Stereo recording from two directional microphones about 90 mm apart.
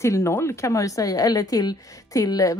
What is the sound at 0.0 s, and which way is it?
Speech, 30° left (ahead or behind).